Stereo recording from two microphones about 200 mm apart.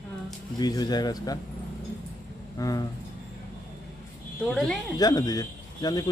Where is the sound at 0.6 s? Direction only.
20° left (ahead or behind).